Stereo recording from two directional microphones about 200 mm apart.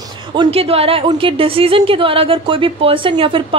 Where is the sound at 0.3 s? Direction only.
25° right (ahead or behind).